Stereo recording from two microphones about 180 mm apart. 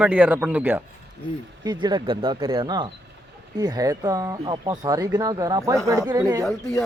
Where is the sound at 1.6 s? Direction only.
25° right (ahead or behind).